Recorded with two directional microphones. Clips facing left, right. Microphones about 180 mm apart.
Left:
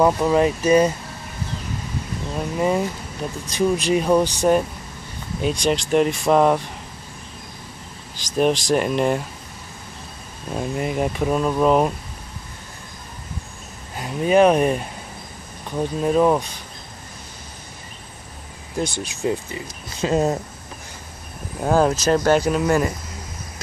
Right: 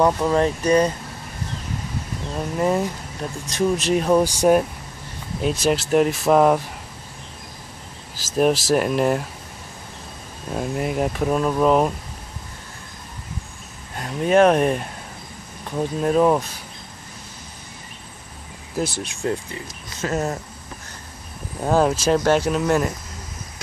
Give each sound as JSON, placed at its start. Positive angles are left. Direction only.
{"t": 0.0, "sound": "speech", "side_deg": 10}
{"t": 2.3, "sound": "speech", "side_deg": 5}
{"t": 4.2, "sound": "speech", "side_deg": -10}
{"t": 8.2, "sound": "speech", "side_deg": -5}
{"t": 10.5, "sound": "speech", "side_deg": 0}
{"t": 13.9, "sound": "speech", "side_deg": 5}
{"t": 18.8, "sound": "speech", "side_deg": 0}
{"t": 20.0, "sound": "speech", "side_deg": 20}
{"t": 21.5, "sound": "speech", "side_deg": 0}